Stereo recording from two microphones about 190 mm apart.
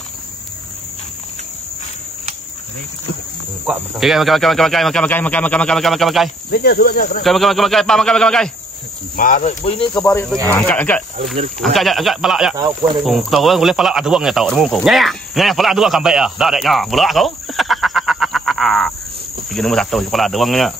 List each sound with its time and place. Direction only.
3.6 s speech: 5° right (ahead or behind)
6.5 s cricket: 55° left (ahead or behind)
7.2 s speech: centre (ahead or behind)
9.1 s speech: 45° left (ahead or behind)
9.7 s speech: 25° left (ahead or behind); by 12.5 s centre (ahead or behind)
12.5 s insect: 25° right (ahead or behind)
13.0 s speech: centre (ahead or behind)